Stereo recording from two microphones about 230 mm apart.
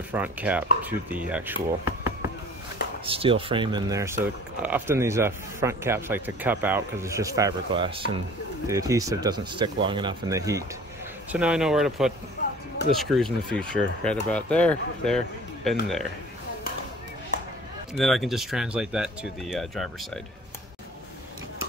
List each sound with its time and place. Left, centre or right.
0.1 s speech: centre
3.1 s speech: right; by 15.7 s centre
17.9 s speech: centre